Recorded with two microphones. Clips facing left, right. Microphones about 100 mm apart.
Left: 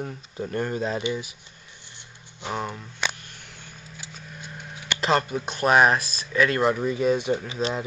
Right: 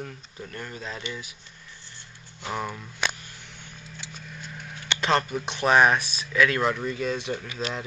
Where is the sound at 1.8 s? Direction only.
20° left (ahead or behind).